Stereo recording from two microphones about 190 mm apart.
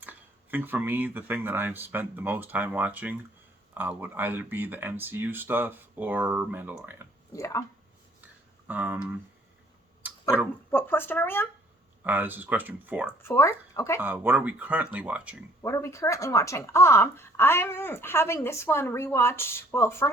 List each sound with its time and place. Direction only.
0.0 s speech: 10° right (ahead or behind)
7.3 s speech: 15° left (ahead or behind)
8.6 s speech: 10° right (ahead or behind)
10.7 s speech: 10° left (ahead or behind)
12.0 s speech: 10° right (ahead or behind)
13.2 s speech: 15° left (ahead or behind)
14.0 s speech: 10° right (ahead or behind)
15.6 s speech: 15° left (ahead or behind)